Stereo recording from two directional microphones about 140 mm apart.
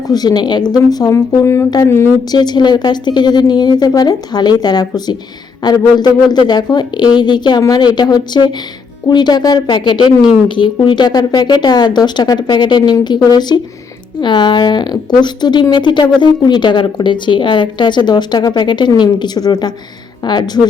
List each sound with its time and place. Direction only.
0.1 s a woman's voice: 30° left (ahead or behind)